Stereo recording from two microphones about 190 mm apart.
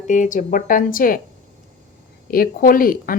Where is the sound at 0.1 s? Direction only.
40° left (ahead or behind).